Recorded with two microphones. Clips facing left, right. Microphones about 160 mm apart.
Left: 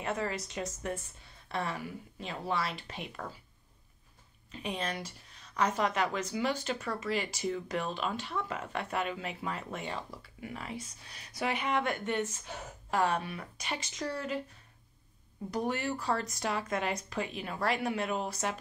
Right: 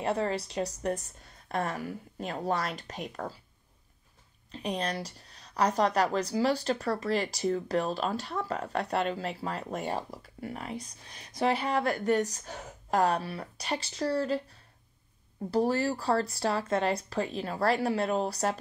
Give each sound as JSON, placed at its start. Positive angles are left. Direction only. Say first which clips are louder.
{"t": 0.0, "sound": "a woman's voice", "louder": "right 5 dB", "side_deg": -35}
{"t": 4.5, "sound": "a woman's voice", "louder": "right 4 dB", "side_deg": -35}
{"t": 11.3, "sound": "a woman's voice", "louder": "right 4 dB", "side_deg": -35}
{"t": 15.5, "sound": "a woman's voice", "louder": "right 6 dB", "side_deg": -35}